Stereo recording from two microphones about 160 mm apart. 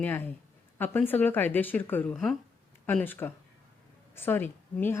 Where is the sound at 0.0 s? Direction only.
10° left (ahead or behind).